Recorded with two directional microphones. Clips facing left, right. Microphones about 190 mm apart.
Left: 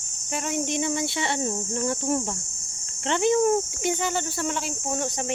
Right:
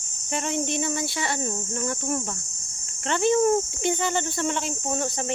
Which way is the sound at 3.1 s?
15° left (ahead or behind).